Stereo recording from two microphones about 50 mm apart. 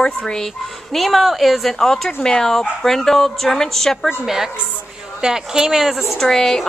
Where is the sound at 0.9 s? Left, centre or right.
Centre.